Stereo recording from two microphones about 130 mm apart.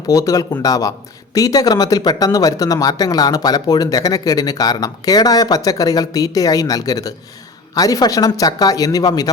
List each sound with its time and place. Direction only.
0.1 s a man's voice: 25° left (ahead or behind)